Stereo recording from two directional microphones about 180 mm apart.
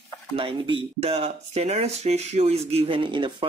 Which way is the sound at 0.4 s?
30° right (ahead or behind).